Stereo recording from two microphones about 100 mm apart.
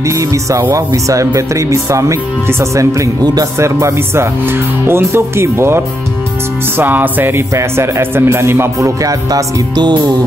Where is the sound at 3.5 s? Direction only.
30° right (ahead or behind); by 10.1 s 45° right (ahead or behind).